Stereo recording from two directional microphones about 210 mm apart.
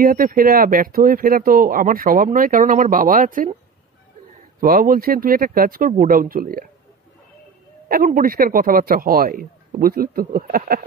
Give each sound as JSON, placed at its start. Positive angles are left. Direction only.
{"t": 0.0, "sound": "speech", "side_deg": -45}
{"t": 4.6, "sound": "speech", "side_deg": -40}
{"t": 7.9, "sound": "speech", "side_deg": -40}